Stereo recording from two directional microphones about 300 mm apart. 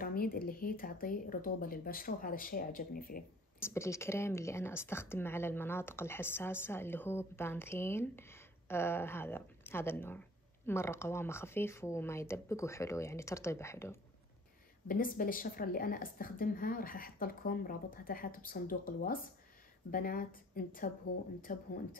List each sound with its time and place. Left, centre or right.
0.0 s a woman's voice: left
3.5 s speech: centre
14.9 s a woman's voice: left